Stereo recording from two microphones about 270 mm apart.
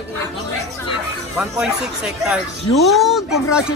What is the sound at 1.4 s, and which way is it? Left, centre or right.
Speech, centre.